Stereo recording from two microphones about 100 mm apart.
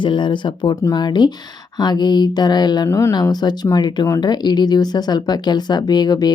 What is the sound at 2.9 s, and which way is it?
Speech, 30° left (ahead or behind).